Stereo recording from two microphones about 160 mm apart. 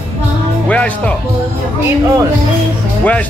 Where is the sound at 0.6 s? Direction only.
10° left (ahead or behind).